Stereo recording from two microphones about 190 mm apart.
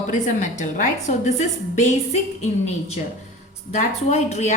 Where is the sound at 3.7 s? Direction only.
35° left (ahead or behind).